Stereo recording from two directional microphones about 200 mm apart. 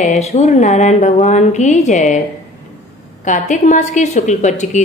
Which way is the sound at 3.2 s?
40° left (ahead or behind).